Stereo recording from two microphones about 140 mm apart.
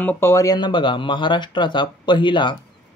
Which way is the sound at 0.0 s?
15° left (ahead or behind).